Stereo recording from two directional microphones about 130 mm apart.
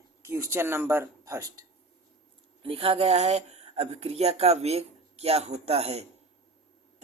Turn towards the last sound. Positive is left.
turn(degrees=-55)  # may be behind; listen again after turning